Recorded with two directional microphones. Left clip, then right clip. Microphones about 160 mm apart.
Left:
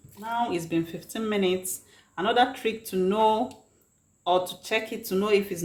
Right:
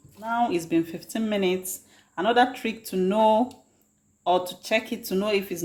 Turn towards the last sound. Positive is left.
turn(degrees=-25)  # may be behind; listen again after turning